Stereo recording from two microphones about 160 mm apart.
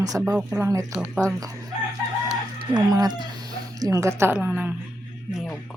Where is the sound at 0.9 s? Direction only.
5° right (ahead or behind).